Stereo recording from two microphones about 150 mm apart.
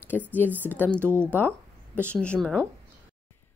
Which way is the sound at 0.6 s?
10° left (ahead or behind).